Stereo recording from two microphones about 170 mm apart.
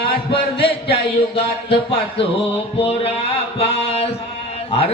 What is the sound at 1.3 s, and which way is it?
Speech, 30° left (ahead or behind).